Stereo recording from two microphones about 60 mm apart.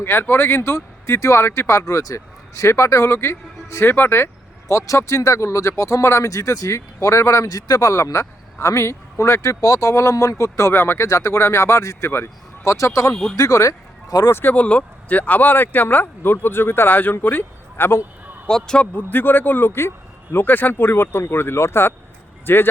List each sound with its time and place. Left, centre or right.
0.0 s speech: left
1.8 s speech: left
4.7 s speech: left
10.7 s speech: left
12.7 s speech: left
14.3 s speech: left
14.5 s speech: left
18.4 s speech: centre
18.9 s speech: left
20.3 s speech: left